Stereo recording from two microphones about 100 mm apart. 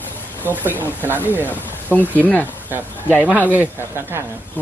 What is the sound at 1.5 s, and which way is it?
Speech, 15° left (ahead or behind).